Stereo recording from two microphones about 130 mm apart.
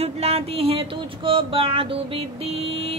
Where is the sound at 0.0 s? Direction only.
50° right (ahead or behind).